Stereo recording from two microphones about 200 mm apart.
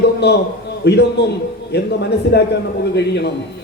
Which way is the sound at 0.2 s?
55° left (ahead or behind).